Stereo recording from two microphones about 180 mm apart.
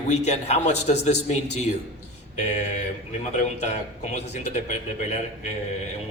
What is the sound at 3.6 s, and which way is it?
Speech, 40° left (ahead or behind).